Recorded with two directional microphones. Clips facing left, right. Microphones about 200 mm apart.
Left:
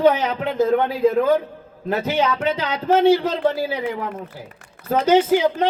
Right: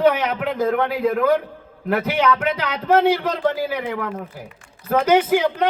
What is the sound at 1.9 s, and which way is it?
A man's voice, 25° left (ahead or behind).